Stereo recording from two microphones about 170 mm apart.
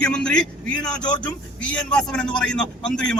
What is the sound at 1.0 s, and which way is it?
Speech, 25° left (ahead or behind).